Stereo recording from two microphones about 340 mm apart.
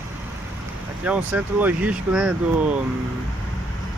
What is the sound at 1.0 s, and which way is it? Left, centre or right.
Speech, centre.